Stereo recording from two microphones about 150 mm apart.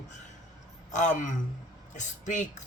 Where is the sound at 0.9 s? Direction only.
55° left (ahead or behind).